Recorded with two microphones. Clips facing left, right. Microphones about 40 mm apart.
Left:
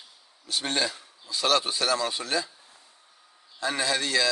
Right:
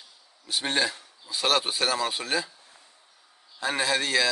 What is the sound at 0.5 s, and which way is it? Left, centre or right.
Speech, centre.